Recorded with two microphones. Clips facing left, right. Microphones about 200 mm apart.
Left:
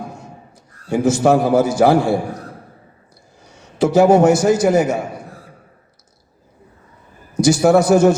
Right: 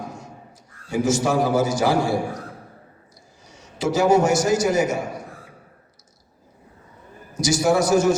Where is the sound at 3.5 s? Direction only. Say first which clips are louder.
Left 7 dB; 60° left (ahead or behind).